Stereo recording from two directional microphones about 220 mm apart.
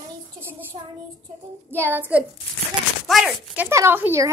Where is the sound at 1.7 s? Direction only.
10° right (ahead or behind).